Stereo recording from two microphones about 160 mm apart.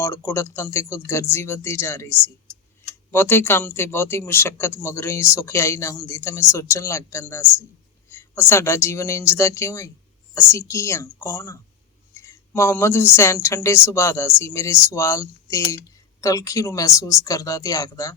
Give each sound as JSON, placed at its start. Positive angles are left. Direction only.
{"t": 0.0, "sound": "speech", "side_deg": 15}